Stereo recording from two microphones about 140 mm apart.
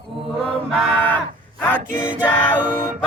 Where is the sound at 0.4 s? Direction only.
10° left (ahead or behind).